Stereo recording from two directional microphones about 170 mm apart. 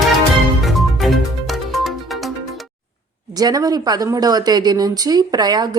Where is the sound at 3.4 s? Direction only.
20° right (ahead or behind).